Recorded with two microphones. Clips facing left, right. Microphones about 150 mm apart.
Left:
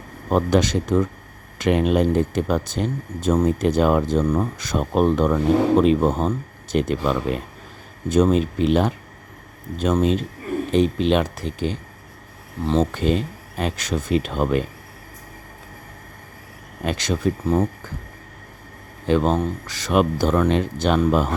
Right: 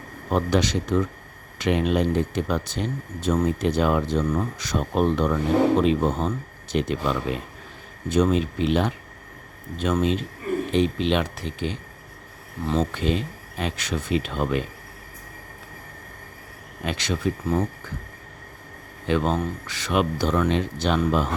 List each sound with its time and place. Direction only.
0.3 s speech: 45° left (ahead or behind)
12.9 s speech: 45° left (ahead or behind)
16.8 s speech: 45° left (ahead or behind)
19.0 s speech: 35° left (ahead or behind)